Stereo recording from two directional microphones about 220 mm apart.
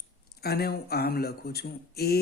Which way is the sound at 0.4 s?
45° left (ahead or behind).